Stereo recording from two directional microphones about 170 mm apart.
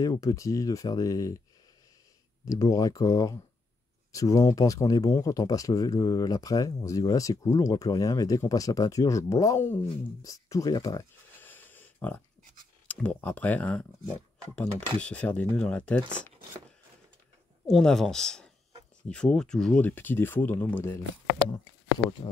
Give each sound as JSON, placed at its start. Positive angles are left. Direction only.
{"t": 0.0, "sound": "speech", "side_deg": 20}
{"t": 2.4, "sound": "speech", "side_deg": 20}
{"t": 10.2, "sound": "a sound", "side_deg": 20}
{"t": 12.8, "sound": "speech", "side_deg": 10}
{"t": 17.6, "sound": "speech", "side_deg": 0}
{"t": 21.5, "sound": "speech", "side_deg": 25}